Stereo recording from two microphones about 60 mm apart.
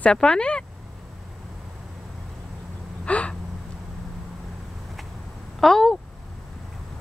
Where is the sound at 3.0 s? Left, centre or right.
Left.